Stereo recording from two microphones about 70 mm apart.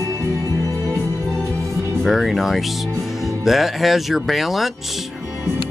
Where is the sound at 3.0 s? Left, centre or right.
Centre.